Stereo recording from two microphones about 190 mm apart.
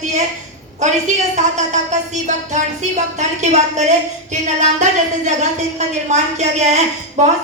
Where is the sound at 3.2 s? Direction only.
40° right (ahead or behind).